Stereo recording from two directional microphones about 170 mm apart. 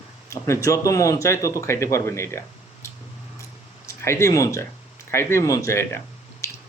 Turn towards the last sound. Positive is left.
turn(degrees=15)  # may be behind; listen again after turning